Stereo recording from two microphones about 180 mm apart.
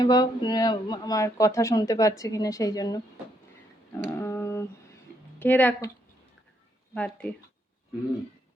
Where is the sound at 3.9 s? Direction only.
15° left (ahead or behind).